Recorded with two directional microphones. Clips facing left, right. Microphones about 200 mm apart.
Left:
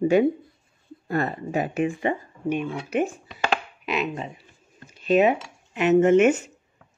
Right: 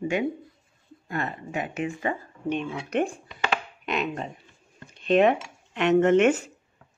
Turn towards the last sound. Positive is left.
turn(degrees=5)  # may be behind; listen again after turning